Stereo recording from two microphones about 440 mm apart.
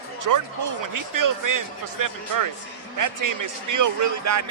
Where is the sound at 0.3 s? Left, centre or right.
Right.